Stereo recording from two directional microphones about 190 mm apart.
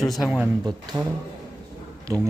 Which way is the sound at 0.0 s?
Centre (ahead or behind).